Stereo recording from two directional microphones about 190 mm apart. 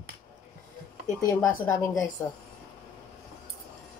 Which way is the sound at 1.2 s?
15° left (ahead or behind).